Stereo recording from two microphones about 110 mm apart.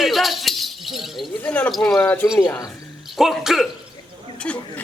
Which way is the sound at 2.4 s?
30° left (ahead or behind).